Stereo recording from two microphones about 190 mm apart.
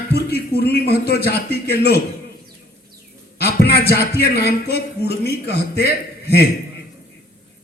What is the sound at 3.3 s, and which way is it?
A man's voice, 60° left (ahead or behind).